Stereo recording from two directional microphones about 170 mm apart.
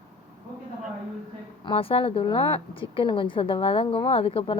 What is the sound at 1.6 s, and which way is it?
A woman's voice, 30° left (ahead or behind).